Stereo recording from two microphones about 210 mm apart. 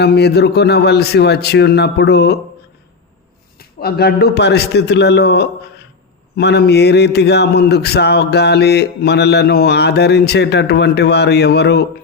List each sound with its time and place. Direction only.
0.0 s speech: 50° left (ahead or behind)
3.6 s speech: 50° left (ahead or behind)